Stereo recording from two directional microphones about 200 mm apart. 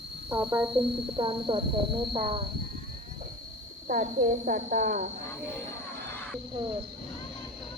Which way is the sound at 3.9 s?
40° right (ahead or behind).